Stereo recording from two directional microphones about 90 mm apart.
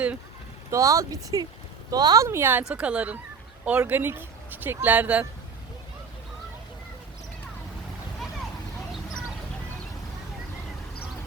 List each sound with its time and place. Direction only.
0.7 s speech: 35° right (ahead or behind)
2.2 s speech: 25° right (ahead or behind)
2.6 s speech: 10° right (ahead or behind)